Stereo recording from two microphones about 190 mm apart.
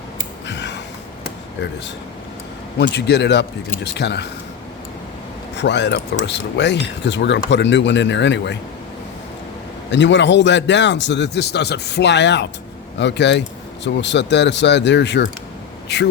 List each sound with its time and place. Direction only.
0.4 s a sound: 65° left (ahead or behind)
2.7 s speech: 65° left (ahead or behind)
5.5 s a man's voice: 65° left (ahead or behind)
9.9 s a man's voice: 70° left (ahead or behind)